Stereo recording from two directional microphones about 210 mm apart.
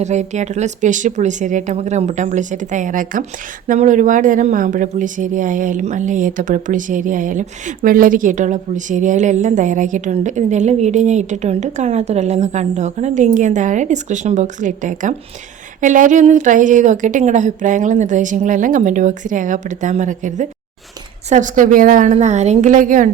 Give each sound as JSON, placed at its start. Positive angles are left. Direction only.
{"t": 0.0, "sound": "a woman's voice", "side_deg": -35}